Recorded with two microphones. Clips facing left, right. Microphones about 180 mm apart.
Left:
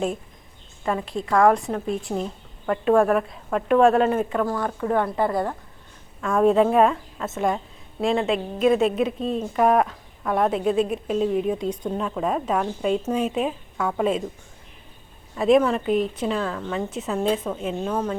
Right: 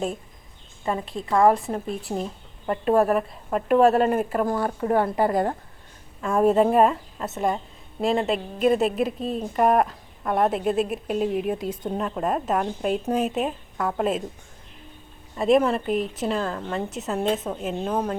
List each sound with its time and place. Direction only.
1.4 s speech: 5° right (ahead or behind)
4.4 s speech: 30° right (ahead or behind)
6.2 s speech: 5° right (ahead or behind)
15.4 s a woman's voice: centre (ahead or behind)